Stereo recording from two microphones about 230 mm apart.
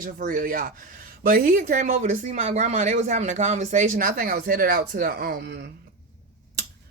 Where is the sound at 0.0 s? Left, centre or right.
Right.